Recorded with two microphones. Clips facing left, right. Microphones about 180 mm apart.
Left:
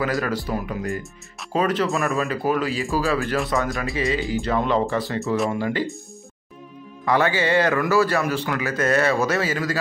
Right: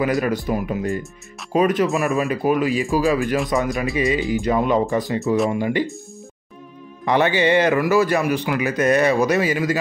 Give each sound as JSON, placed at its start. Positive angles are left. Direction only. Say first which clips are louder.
{"t": 0.0, "sound": "a man's voice", "louder": "right 4 dB", "side_deg": -20}
{"t": 5.2, "sound": "speech", "louder": "right 4 dB", "side_deg": 0}
{"t": 5.6, "sound": "a man's voice", "louder": "right 3 dB", "side_deg": -15}
{"t": 7.1, "sound": "a man's voice", "louder": "right 3 dB", "side_deg": -20}